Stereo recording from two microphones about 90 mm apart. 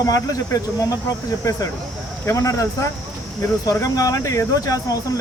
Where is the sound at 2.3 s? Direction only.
35° left (ahead or behind).